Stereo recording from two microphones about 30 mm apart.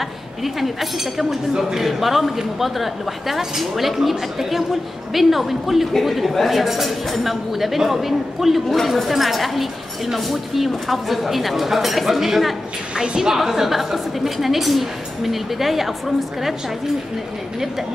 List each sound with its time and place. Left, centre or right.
0.4 s a woman's voice: centre
12.9 s a woman's voice: right
13.3 s a woman's voice: centre